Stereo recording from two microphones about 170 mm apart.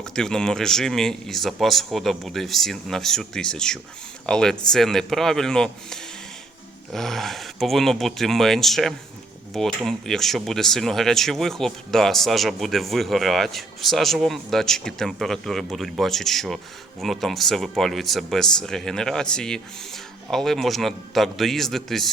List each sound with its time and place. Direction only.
0.0 s speech: 5° left (ahead or behind)